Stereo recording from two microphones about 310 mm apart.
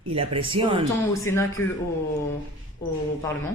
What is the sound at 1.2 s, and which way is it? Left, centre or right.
Speech, centre.